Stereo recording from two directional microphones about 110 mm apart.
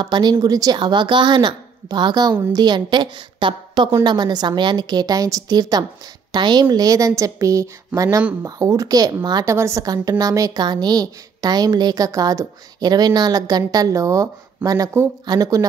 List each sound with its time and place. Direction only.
0.0 s a woman's voice: 45° right (ahead or behind)
8.2 s speech: 10° right (ahead or behind)
8.5 s a woman's voice: 30° right (ahead or behind)